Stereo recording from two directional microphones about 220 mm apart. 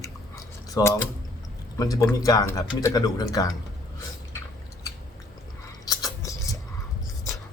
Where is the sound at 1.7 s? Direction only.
15° left (ahead or behind).